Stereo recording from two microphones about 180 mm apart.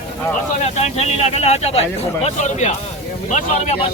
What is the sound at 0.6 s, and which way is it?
Speech, 35° left (ahead or behind).